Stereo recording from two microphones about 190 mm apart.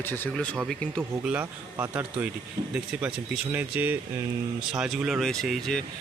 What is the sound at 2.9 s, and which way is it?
Speech, 5° right (ahead or behind).